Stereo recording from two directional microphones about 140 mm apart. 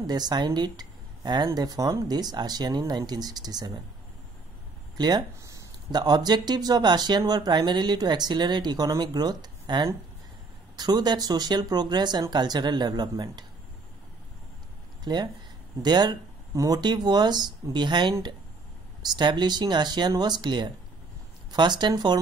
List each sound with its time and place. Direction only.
0.0 s speech: 30° right (ahead or behind)
4.9 s speech: 30° right (ahead or behind)
15.1 s speech: 30° right (ahead or behind)